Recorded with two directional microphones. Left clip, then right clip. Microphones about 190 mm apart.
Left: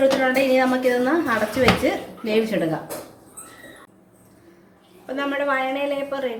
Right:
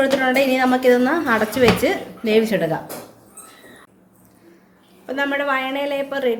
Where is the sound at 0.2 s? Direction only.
70° right (ahead or behind).